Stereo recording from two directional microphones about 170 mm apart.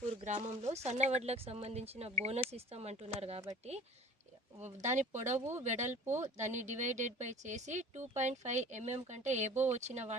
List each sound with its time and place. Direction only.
0.0 s speech: 40° right (ahead or behind)
4.6 s speech: 45° right (ahead or behind)
5.4 s speech: 15° right (ahead or behind)
5.6 s speech: 45° right (ahead or behind)